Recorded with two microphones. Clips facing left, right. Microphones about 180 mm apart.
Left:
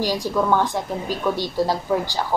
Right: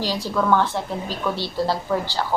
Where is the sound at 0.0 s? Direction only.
15° left (ahead or behind).